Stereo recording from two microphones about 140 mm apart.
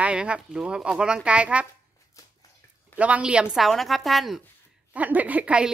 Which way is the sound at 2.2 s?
25° left (ahead or behind).